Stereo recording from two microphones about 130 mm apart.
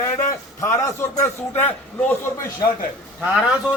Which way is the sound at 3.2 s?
5° right (ahead or behind).